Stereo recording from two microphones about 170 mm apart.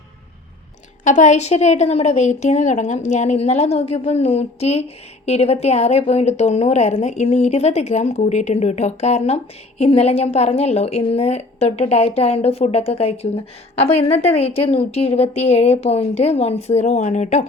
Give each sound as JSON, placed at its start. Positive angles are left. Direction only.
{"t": 1.0, "sound": "a woman's voice", "side_deg": 45}